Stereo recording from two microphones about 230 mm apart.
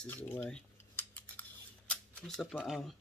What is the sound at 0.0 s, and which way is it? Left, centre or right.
Cutlery, centre.